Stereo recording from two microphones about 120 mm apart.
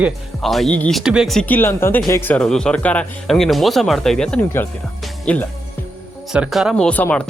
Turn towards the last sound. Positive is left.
turn(degrees=10)  # may be behind; listen again after turning